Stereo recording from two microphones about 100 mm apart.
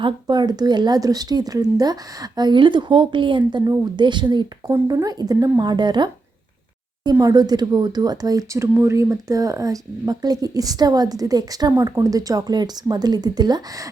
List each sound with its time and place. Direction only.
0.0 s a woman's voice: 45° right (ahead or behind)
4.7 s a woman's voice: 35° right (ahead or behind)
8.5 s speech: 25° right (ahead or behind); by 13.6 s 40° right (ahead or behind)